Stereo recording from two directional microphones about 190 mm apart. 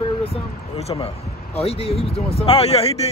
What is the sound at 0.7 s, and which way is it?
Speech, 30° left (ahead or behind).